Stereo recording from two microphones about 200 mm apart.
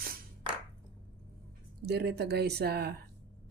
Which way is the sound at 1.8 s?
55° right (ahead or behind).